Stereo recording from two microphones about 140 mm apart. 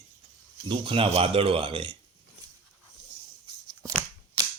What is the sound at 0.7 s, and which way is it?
Speech, 40° right (ahead or behind).